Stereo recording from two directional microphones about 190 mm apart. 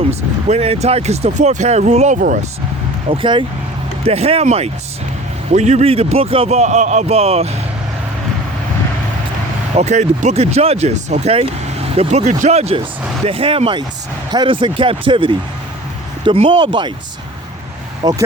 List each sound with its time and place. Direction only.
0.1 s speech: 35° right (ahead or behind)
3.1 s speech: 25° right (ahead or behind)
9.7 s speech: 35° right (ahead or behind)
18.0 s speech: 20° right (ahead or behind)